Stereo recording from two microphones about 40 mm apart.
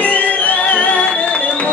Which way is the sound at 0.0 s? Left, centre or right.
Left.